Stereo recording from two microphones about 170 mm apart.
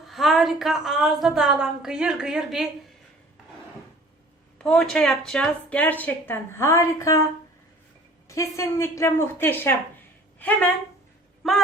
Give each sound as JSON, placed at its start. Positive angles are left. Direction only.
{"t": 0.1, "sound": "a woman's voice", "side_deg": 0}
{"t": 4.5, "sound": "a woman's voice", "side_deg": 0}
{"t": 8.3, "sound": "a woman's voice", "side_deg": 15}
{"t": 11.4, "sound": "a woman's voice", "side_deg": 0}